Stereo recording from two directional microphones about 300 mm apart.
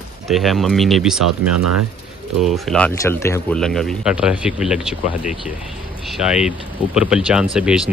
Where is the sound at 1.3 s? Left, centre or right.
Right.